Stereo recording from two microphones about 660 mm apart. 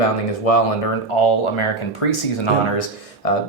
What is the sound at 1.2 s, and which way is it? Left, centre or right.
Speech, left.